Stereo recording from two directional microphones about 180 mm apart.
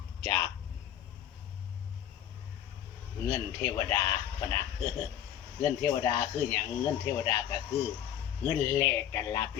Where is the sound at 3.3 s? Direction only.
15° left (ahead or behind).